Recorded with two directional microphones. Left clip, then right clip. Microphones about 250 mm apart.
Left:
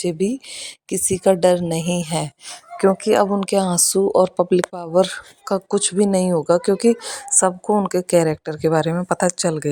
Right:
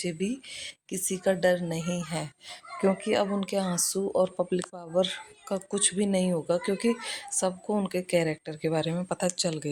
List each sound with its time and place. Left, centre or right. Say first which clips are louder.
0.0 s speech: left 11 dB; left